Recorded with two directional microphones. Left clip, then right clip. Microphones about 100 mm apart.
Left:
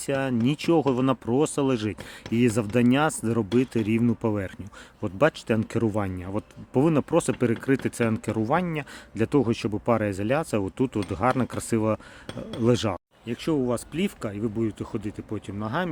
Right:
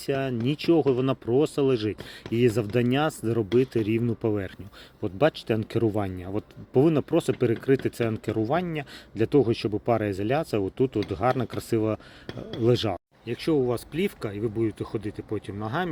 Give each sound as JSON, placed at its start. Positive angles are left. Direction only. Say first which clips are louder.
{"t": 0.0, "sound": "speech", "louder": "left 2 dB", "side_deg": 45}